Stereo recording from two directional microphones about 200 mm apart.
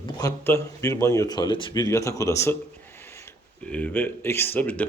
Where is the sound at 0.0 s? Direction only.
15° left (ahead or behind).